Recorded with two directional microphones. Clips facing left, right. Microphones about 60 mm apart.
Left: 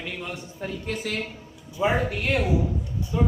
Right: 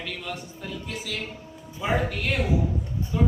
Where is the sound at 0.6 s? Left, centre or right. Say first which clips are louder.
Left 4 dB; left.